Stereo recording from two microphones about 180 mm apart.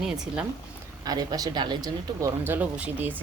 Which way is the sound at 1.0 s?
20° right (ahead or behind).